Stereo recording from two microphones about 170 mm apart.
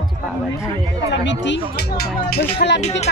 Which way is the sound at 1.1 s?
85° left.